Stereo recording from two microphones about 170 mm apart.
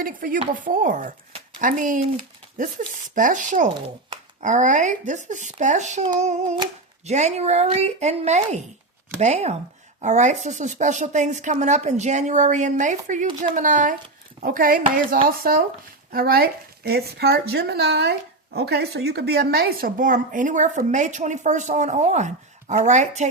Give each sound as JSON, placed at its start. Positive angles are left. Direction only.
{"t": 0.0, "sound": "speech", "side_deg": -55}